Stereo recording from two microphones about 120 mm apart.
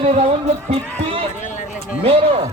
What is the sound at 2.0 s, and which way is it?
Speech, 55° right (ahead or behind).